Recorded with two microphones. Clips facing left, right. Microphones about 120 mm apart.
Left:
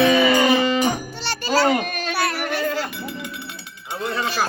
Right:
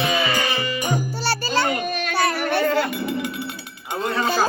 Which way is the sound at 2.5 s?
60° right (ahead or behind).